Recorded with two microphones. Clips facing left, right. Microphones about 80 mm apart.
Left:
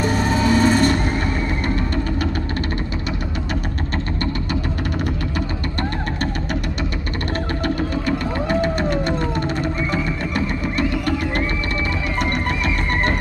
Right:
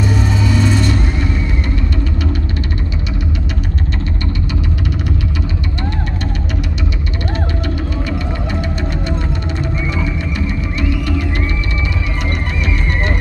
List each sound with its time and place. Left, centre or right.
0.0 s music: left
8.5 s music: left
10.3 s music: left